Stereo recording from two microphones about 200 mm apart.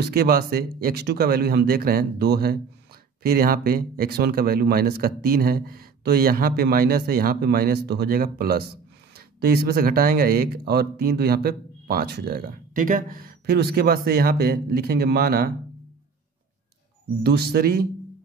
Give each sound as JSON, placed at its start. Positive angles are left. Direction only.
{"t": 0.0, "sound": "speech", "side_deg": -50}
{"t": 17.2, "sound": "speech", "side_deg": -55}